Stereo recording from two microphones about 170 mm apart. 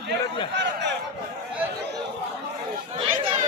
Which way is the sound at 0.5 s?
90° right.